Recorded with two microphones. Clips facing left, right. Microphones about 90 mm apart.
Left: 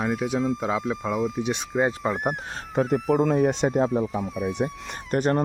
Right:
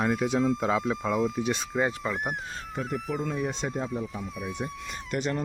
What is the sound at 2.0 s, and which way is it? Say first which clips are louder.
Speech: left 5 dB; 30° left (ahead or behind).